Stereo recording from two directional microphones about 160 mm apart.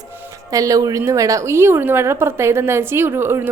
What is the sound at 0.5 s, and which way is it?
A woman's voice, 20° right (ahead or behind).